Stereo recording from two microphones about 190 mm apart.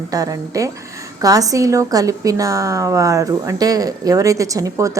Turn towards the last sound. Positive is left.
turn(degrees=-15)  # may be behind; listen again after turning